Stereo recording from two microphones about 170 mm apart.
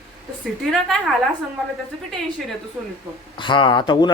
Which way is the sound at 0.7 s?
Centre (ahead or behind).